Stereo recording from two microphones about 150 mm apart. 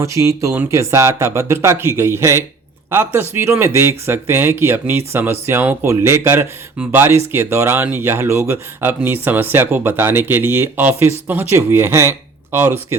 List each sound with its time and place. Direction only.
0.0 s speech: 20° right (ahead or behind)